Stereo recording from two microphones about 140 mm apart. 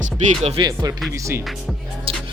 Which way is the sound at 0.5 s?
30° right (ahead or behind).